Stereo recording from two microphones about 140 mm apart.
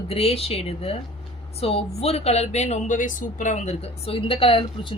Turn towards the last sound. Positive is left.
turn(degrees=40)  # may be behind; listen again after turning